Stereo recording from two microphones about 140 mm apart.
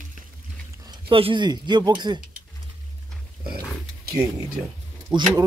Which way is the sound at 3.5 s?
90° right.